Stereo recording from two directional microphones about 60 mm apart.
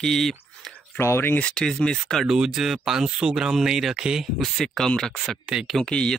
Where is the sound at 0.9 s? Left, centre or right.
Left.